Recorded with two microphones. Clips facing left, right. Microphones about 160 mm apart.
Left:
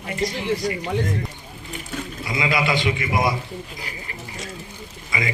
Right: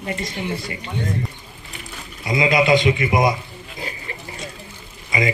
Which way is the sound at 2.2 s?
20° right (ahead or behind).